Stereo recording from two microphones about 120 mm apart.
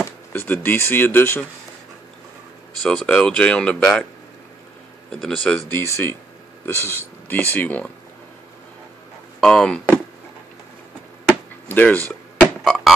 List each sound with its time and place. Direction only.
0.0 s speech: 15° left (ahead or behind)
2.8 s speech: 10° left (ahead or behind)
5.1 s speech: 5° left (ahead or behind)
5.7 s speech: 20° left (ahead or behind)
9.4 s speech: 5° left (ahead or behind)
11.2 s a sound: 15° left (ahead or behind)
12.6 s music: centre (ahead or behind)